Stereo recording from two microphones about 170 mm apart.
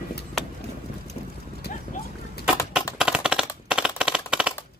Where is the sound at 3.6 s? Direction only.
5° right (ahead or behind).